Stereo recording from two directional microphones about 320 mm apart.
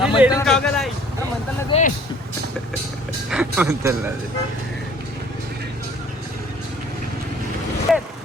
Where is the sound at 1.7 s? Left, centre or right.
Left.